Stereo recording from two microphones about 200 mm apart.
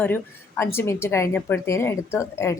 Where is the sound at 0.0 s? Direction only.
10° left (ahead or behind).